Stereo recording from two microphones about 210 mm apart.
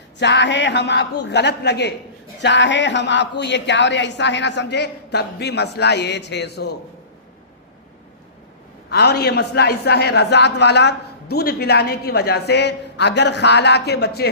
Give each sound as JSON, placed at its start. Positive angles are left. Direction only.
{"t": 0.2, "sound": "a woman's voice", "side_deg": 55}
{"t": 8.9, "sound": "a man's voice", "side_deg": 50}